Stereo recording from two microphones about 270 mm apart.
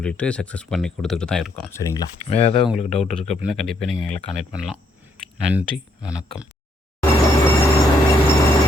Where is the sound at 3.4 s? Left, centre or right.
Centre.